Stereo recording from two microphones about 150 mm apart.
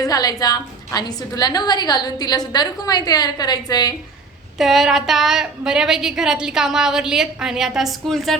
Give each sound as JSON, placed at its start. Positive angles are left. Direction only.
{"t": 0.0, "sound": "a woman's voice", "side_deg": 25}
{"t": 4.5, "sound": "a woman's voice", "side_deg": 0}